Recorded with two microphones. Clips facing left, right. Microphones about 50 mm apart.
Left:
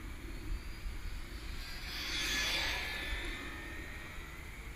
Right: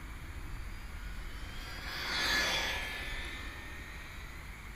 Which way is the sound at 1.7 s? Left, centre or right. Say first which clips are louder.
Right 4 dB; right.